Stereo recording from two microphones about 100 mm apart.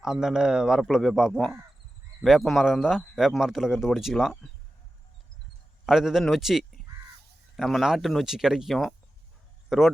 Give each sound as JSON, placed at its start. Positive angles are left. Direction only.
{"t": 0.0, "sound": "speech", "side_deg": -5}
{"t": 5.8, "sound": "a man's voice", "side_deg": -5}